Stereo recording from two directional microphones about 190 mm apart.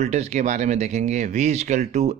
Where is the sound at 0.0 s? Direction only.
35° right (ahead or behind).